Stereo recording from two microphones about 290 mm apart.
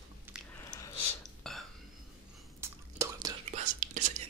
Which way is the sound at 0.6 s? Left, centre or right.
Centre.